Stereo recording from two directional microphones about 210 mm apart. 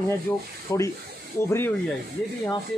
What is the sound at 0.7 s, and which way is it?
Speech, 15° left (ahead or behind).